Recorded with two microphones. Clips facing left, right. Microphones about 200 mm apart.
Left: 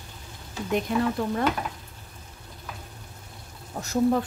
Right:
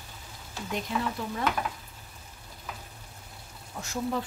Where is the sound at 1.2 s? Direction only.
50° left (ahead or behind).